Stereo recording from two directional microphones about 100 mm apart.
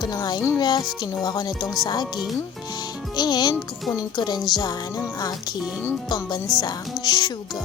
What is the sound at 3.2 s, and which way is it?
Speech, 45° left (ahead or behind).